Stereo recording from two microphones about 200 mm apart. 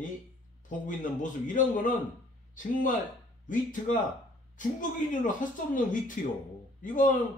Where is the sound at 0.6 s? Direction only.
40° left (ahead or behind).